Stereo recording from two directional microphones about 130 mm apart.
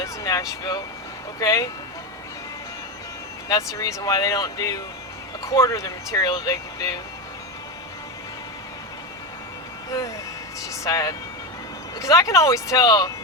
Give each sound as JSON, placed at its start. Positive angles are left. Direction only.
{"t": 0.0, "sound": "speech", "side_deg": 25}
{"t": 3.8, "sound": "speech", "side_deg": 25}
{"t": 10.8, "sound": "speech", "side_deg": 25}